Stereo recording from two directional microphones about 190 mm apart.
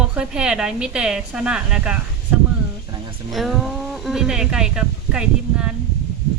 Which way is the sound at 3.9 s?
Centre (ahead or behind).